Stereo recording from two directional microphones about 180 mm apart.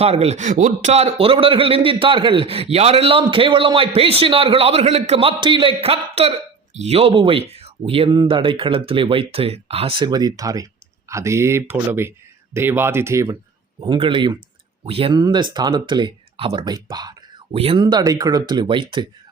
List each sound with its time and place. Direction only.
0.0 s a man's voice: 35° right (ahead or behind); by 13.3 s 15° right (ahead or behind)
13.8 s speech: 25° right (ahead or behind)